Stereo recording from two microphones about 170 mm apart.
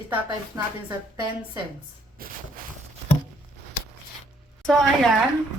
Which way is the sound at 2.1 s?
55° right (ahead or behind).